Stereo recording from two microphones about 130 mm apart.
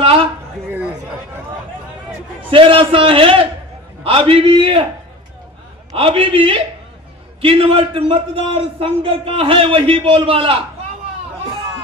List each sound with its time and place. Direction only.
0.0 s a sound: 45° right (ahead or behind)
0.7 s chatter: 10° right (ahead or behind)
2.5 s a man's voice: 45° right (ahead or behind)
5.9 s a man's voice: 45° right (ahead or behind)